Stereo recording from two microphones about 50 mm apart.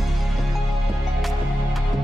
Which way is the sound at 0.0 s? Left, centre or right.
Centre.